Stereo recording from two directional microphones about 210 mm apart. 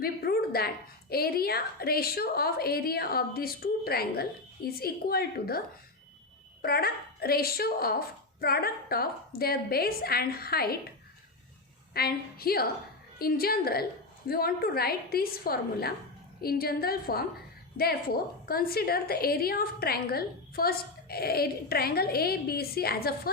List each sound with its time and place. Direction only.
0.0 s a sound: 45° left (ahead or behind)
1.1 s a woman's voice: 45° left (ahead or behind)
11.9 s a woman's voice: 45° left (ahead or behind)